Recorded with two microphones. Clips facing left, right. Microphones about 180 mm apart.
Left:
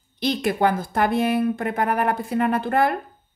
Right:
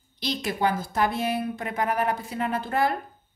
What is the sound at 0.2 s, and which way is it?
A woman's voice, 55° left (ahead or behind).